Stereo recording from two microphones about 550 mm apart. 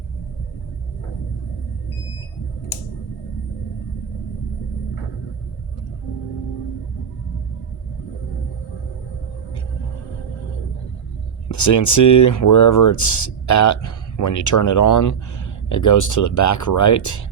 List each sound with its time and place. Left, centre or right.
11.4 s speech: left